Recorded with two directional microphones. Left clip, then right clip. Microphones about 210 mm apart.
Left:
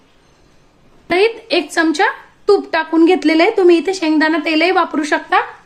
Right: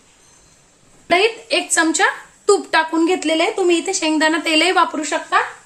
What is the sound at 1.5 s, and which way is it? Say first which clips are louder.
A woman's voice: left 2 dB; 20° left (ahead or behind).